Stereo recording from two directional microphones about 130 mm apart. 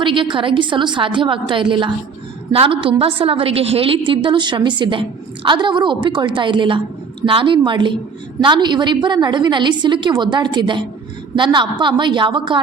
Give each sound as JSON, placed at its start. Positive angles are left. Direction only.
{"t": 0.0, "sound": "a woman's voice", "side_deg": -40}